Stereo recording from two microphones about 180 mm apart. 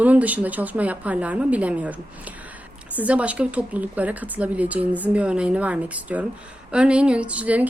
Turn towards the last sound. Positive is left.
turn(degrees=-10)  # may be behind; listen again after turning